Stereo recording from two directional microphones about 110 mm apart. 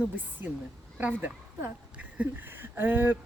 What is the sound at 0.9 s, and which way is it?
Speech, 15° right (ahead or behind).